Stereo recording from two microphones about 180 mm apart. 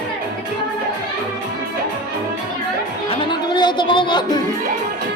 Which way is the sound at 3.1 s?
25° left (ahead or behind).